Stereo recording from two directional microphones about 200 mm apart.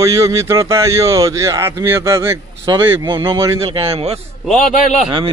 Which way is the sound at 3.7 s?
30° right (ahead or behind).